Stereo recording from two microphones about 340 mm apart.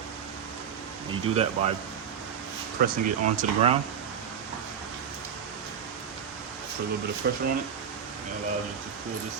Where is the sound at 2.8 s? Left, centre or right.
Right.